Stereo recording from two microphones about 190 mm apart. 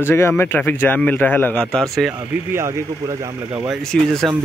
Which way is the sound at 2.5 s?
15° right (ahead or behind).